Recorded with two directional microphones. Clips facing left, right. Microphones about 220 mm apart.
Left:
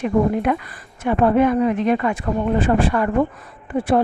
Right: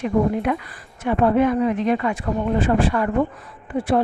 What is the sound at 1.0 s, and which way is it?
A woman's voice, 55° left (ahead or behind).